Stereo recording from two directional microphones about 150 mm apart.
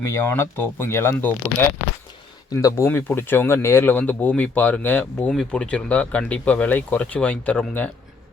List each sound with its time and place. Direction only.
0.0 s speech: 15° left (ahead or behind)